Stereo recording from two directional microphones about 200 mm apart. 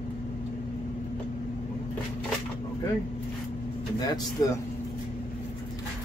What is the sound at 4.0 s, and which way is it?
Speech, 20° left (ahead or behind).